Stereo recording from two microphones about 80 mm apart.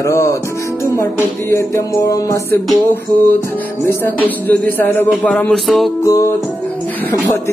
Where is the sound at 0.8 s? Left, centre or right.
Left.